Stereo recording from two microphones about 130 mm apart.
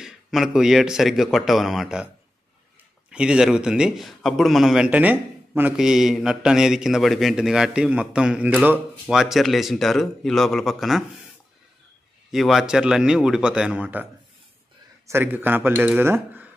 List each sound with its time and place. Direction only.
0.0 s a man's voice: 5° right (ahead or behind)
3.1 s a man's voice: 5° right (ahead or behind)
5.8 s a man's voice: 5° right (ahead or behind)
12.3 s a man's voice: 5° right (ahead or behind)
15.0 s speech: 15° right (ahead or behind)